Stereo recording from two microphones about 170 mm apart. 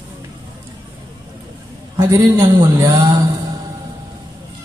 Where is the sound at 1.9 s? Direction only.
20° right (ahead or behind).